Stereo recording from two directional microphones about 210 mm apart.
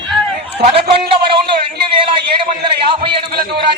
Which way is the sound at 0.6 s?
25° right (ahead or behind).